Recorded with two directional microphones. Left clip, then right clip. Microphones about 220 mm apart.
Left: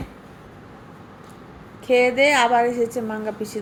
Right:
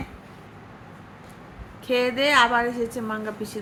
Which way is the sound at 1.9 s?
5° right (ahead or behind).